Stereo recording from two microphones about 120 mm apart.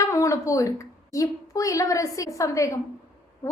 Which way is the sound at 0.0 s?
25° left (ahead or behind).